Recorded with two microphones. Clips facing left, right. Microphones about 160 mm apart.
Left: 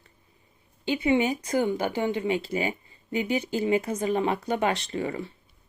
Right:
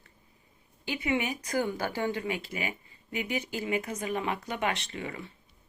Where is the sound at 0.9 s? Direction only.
30° left (ahead or behind).